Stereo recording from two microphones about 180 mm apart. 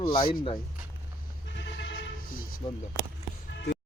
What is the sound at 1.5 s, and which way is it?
Bleat, 75° left (ahead or behind).